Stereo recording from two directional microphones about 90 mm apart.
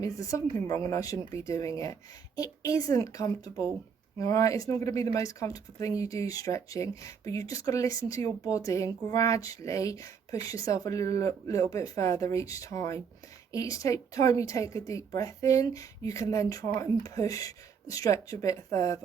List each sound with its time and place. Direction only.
0.0 s speech: 35° left (ahead or behind)